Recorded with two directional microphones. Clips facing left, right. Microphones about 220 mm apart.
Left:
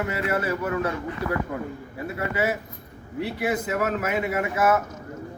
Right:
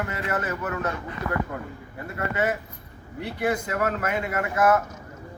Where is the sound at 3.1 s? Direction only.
5° left (ahead or behind).